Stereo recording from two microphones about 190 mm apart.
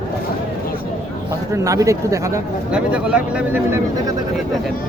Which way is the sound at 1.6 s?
15° right (ahead or behind).